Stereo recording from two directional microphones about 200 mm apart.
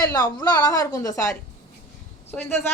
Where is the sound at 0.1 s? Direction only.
20° left (ahead or behind).